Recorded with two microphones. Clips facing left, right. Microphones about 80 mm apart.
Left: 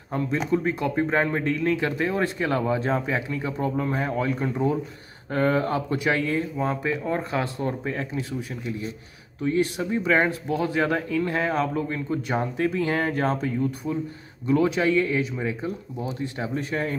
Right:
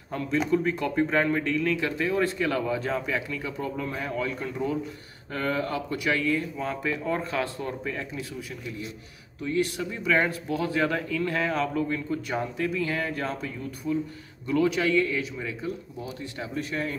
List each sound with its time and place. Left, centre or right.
0.5 s speech: centre